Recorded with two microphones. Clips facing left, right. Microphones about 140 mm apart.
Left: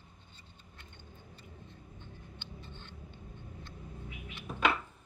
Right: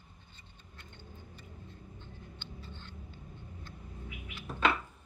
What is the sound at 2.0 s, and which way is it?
Vehicle, 15° left (ahead or behind).